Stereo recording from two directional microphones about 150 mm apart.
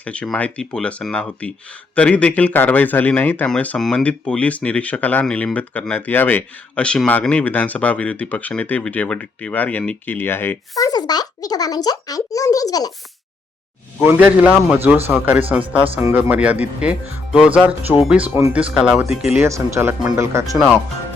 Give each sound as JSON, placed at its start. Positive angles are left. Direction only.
{"t": 0.0, "sound": "a man's voice", "side_deg": 10}
{"t": 14.0, "sound": "speech", "side_deg": -10}
{"t": 19.4, "sound": "speech", "side_deg": -20}